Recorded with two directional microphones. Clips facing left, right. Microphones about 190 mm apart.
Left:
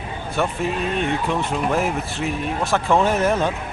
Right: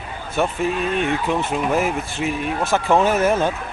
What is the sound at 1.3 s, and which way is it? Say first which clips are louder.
Speech: right 1 dB; 5° right (ahead or behind).